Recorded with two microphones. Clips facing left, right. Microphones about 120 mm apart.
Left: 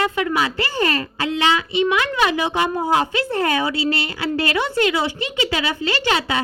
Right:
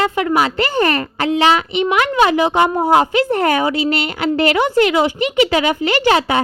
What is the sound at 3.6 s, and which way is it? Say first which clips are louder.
A woman's voice: right 4 dB; 20° right (ahead or behind).